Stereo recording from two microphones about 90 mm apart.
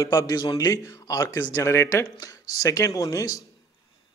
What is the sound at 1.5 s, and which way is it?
A man's voice, 30° left (ahead or behind).